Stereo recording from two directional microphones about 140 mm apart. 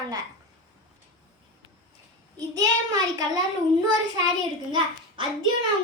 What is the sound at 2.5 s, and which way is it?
Speech, 25° right (ahead or behind).